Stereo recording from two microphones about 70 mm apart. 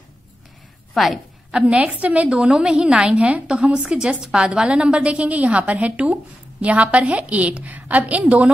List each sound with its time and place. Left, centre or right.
0.9 s a woman's voice: centre
1.5 s a woman's voice: centre